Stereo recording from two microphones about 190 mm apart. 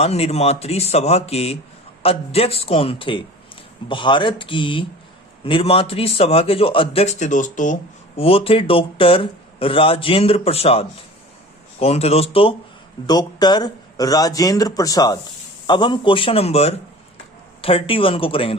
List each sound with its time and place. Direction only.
0.0 s a man's voice: 35° left (ahead or behind)